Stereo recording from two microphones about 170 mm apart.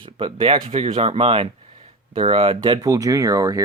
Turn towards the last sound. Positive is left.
turn(degrees=-20)  # may be behind; listen again after turning